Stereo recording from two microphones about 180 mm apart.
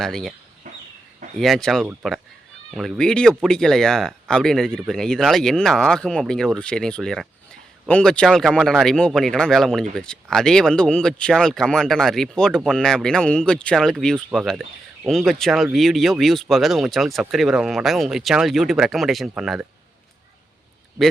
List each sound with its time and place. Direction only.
0.0 s speech: centre (ahead or behind)
0.7 s a sound: 45° right (ahead or behind)
1.4 s speech: centre (ahead or behind)